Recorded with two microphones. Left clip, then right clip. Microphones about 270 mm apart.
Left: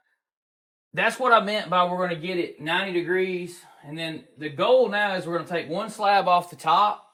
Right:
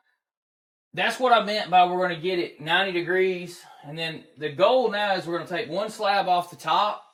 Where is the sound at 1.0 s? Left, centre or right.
Centre.